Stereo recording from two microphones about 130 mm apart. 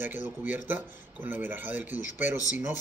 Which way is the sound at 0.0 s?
15° right (ahead or behind).